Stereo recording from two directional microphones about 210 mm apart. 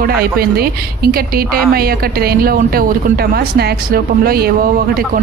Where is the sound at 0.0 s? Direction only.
45° right (ahead or behind).